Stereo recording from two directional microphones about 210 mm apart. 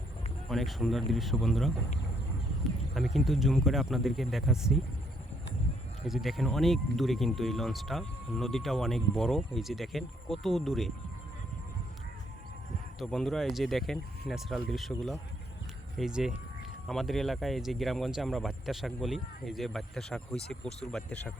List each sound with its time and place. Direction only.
0.4 s speech: centre (ahead or behind)
2.9 s speech: centre (ahead or behind)
6.1 s speech: centre (ahead or behind)
13.0 s speech: centre (ahead or behind)